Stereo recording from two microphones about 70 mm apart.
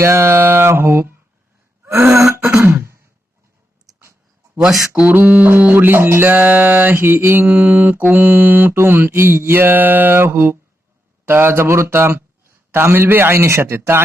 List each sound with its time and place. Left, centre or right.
0.0 s speech: right
1.8 s throat clearing: right
2.6 s a sound: right
5.1 s music: right
11.3 s speech: right